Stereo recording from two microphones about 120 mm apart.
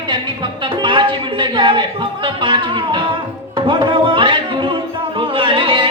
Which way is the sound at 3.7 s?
45° right (ahead or behind).